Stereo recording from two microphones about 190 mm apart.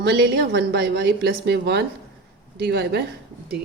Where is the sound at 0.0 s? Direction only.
65° right (ahead or behind).